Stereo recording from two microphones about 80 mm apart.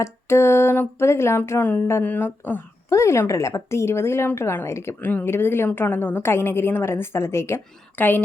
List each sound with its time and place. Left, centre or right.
0.0 s a woman's voice: left
2.9 s a woman's voice: left